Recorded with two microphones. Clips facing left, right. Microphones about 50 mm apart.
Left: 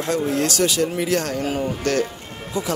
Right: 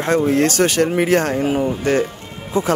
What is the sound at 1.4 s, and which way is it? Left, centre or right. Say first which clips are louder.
Speech: right 5 dB; centre.